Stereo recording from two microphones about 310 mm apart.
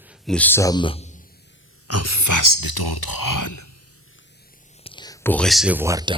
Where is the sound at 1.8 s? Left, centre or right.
Left.